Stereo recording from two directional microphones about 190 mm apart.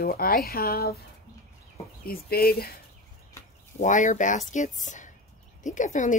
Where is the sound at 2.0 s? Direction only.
55° left (ahead or behind).